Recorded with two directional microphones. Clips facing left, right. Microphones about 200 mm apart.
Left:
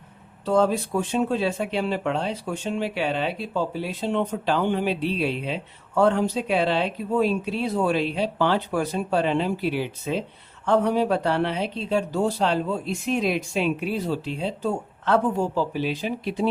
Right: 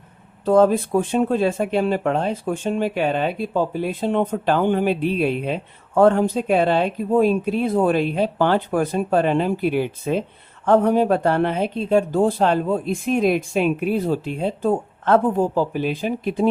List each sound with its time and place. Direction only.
0.4 s speech: 50° right (ahead or behind)